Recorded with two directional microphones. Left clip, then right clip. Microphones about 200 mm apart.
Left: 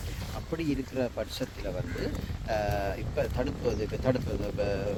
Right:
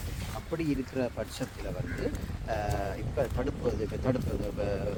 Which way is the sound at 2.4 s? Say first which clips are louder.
Left 3 dB; 50° left (ahead or behind).